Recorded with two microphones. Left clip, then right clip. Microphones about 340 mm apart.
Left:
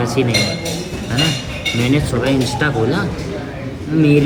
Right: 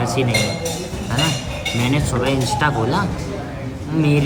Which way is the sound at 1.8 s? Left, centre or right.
Centre.